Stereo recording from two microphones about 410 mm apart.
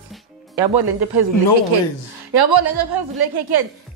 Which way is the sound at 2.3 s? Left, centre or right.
Right.